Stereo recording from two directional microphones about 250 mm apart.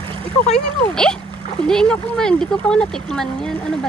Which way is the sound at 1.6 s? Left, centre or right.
Centre.